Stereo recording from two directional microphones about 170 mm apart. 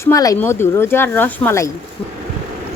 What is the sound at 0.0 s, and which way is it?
Speech, 20° left (ahead or behind).